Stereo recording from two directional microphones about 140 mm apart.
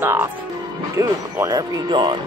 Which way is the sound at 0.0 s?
15° right (ahead or behind).